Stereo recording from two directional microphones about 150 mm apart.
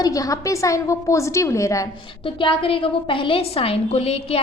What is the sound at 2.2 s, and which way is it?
A woman's voice, 35° left (ahead or behind).